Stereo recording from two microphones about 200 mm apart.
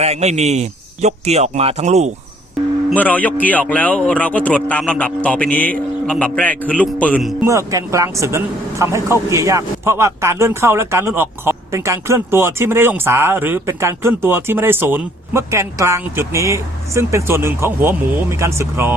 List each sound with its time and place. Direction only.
0.0 s speech: 35° right (ahead or behind)
2.9 s a man's voice: 5° left (ahead or behind)
7.4 s speech: 15° right (ahead or behind)